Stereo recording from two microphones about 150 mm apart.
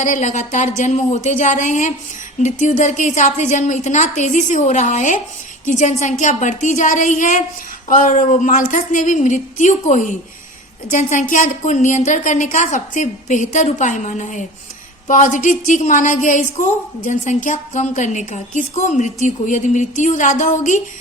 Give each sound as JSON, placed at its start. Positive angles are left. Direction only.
{"t": 0.0, "sound": "a woman's voice", "side_deg": 55}